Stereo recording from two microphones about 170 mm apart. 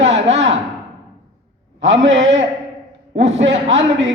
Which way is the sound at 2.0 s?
90° right.